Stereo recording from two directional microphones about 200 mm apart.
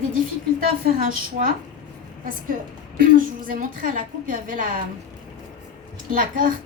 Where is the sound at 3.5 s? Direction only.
45° right (ahead or behind).